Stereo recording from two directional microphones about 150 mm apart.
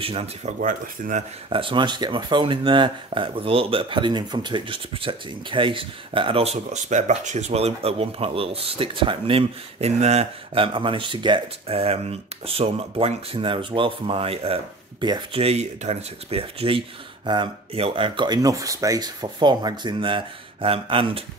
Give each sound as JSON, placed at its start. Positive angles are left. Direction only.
{"t": 0.0, "sound": "speech", "side_deg": -40}
{"t": 0.6, "sound": "speech", "side_deg": -60}
{"t": 1.5, "sound": "speech", "side_deg": -35}